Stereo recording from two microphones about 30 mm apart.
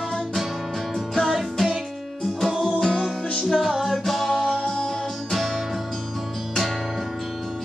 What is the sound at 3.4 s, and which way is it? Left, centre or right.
Music, centre.